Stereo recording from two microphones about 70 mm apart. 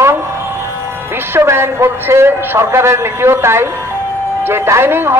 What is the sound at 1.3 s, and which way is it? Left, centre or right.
A man's voice, right.